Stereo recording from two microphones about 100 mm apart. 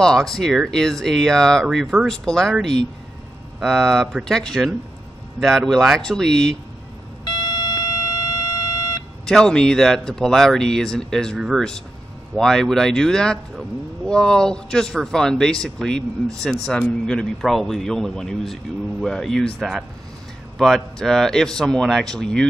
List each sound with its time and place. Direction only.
0.0 s a man's voice: 5° left (ahead or behind)
3.5 s a man's voice: 5° left (ahead or behind)
7.2 s alarm clock: 45° left (ahead or behind)
9.2 s a man's voice: 5° left (ahead or behind)